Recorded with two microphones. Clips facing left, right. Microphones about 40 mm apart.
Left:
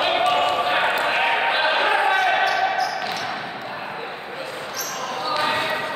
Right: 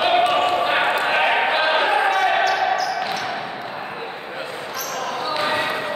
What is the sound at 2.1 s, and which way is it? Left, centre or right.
Basketball bounce, centre.